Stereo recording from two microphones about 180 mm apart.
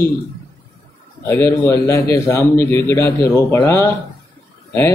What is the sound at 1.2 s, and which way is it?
A man's voice, 10° left (ahead or behind).